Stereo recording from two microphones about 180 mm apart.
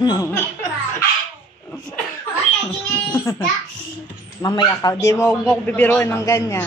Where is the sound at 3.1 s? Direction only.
10° left (ahead or behind).